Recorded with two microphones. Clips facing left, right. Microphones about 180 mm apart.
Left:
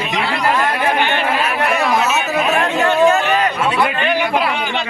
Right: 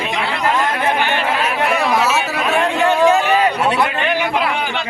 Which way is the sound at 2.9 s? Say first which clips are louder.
Even; 10° right (ahead or behind).